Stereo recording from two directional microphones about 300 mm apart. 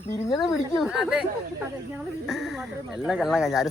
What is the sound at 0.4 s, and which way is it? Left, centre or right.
Speech, centre.